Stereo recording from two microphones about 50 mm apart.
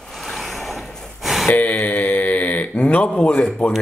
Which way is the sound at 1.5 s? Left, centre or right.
Left.